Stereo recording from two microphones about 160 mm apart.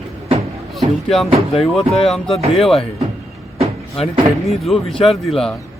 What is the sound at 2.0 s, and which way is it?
Speech, centre (ahead or behind).